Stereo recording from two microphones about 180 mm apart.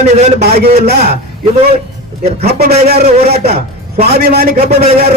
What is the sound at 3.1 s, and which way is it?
Speech, 35° right (ahead or behind).